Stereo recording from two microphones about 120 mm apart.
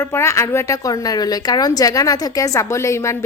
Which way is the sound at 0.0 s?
20° left (ahead or behind).